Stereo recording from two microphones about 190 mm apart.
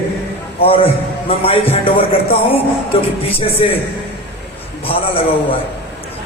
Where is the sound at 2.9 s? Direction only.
30° left (ahead or behind).